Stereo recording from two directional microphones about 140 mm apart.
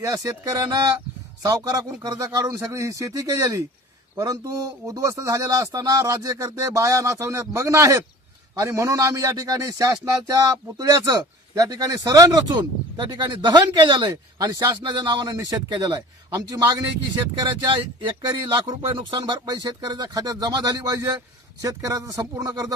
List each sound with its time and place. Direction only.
0.0 s a man's voice: 25° right (ahead or behind)